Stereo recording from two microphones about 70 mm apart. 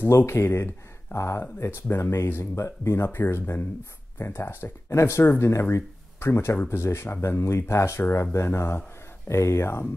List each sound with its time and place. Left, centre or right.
0.0 s speech: left
4.8 s speech: left